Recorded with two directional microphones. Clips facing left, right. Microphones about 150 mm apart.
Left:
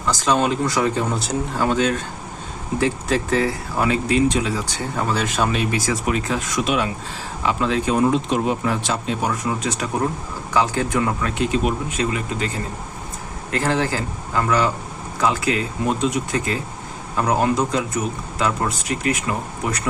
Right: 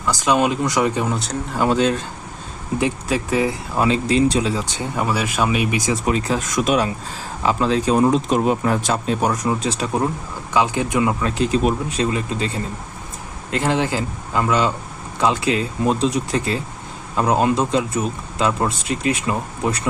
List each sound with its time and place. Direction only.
0.1 s speech: 15° right (ahead or behind)
1.1 s speech: centre (ahead or behind)
1.6 s speech: 20° right (ahead or behind)
2.8 s speech: 10° right (ahead or behind)
3.8 s speech: 25° right (ahead or behind)
6.1 s speech: 35° right (ahead or behind)
10.5 s speech: 15° right (ahead or behind)
11.2 s speech: 35° right (ahead or behind)
13.5 s speech: 20° right (ahead or behind)